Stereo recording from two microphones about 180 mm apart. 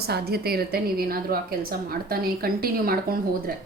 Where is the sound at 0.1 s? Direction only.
60° right (ahead or behind).